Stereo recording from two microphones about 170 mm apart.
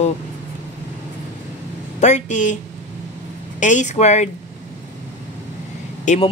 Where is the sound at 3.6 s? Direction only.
45° left (ahead or behind).